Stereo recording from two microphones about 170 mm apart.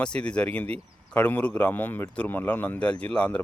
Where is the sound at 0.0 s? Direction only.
5° left (ahead or behind).